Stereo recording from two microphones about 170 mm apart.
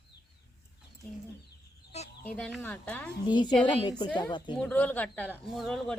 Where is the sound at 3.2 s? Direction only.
25° left (ahead or behind).